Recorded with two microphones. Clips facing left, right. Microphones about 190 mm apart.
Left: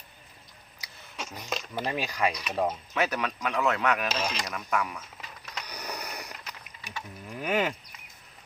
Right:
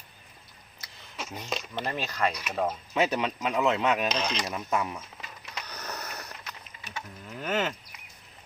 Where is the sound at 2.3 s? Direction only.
5° right (ahead or behind).